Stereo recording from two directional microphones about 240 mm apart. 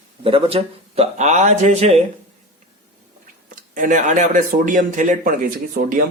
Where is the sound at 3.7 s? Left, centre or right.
Right.